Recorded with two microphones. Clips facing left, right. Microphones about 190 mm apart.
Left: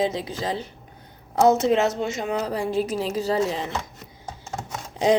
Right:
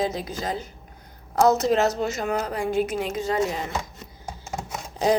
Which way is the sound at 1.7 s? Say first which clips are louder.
Even; 25° left (ahead or behind).